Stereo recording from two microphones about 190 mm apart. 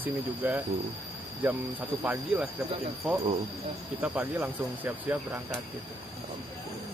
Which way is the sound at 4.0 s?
10° right (ahead or behind).